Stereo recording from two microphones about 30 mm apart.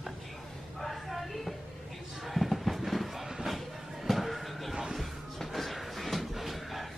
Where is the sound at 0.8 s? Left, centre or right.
Centre.